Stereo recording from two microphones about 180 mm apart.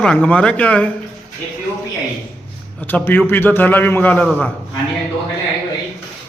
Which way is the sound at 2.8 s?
10° left (ahead or behind).